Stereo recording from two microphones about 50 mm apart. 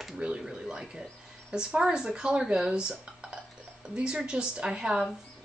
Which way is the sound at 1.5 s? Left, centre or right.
Centre.